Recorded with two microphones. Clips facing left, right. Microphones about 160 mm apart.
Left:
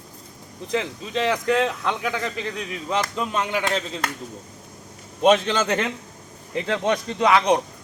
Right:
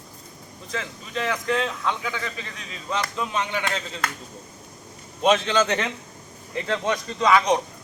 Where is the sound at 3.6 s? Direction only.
40° left (ahead or behind).